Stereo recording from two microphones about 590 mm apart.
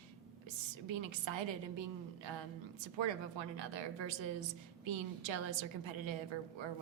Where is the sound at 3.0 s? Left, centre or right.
Right.